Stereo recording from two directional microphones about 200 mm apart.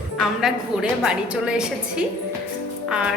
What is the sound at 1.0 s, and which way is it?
A woman's voice, 5° right (ahead or behind).